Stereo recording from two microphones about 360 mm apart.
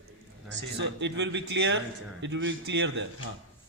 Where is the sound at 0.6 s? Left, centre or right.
Right.